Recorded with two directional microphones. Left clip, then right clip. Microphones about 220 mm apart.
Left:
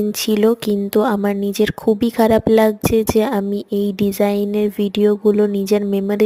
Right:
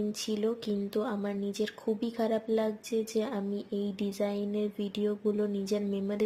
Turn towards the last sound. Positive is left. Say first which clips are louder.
# left 15 dB
turn(degrees=45)  # may be behind; listen again after turning